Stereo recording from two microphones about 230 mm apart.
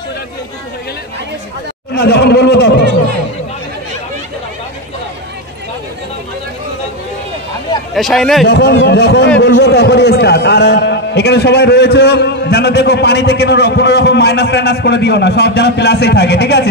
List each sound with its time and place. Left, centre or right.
2.0 s a man's voice: left
7.9 s speech: centre
8.5 s a man's voice: left